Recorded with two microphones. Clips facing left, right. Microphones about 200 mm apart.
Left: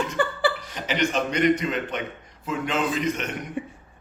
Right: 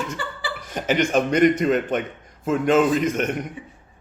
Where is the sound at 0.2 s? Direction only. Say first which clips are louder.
Left 8 dB; 55° left (ahead or behind).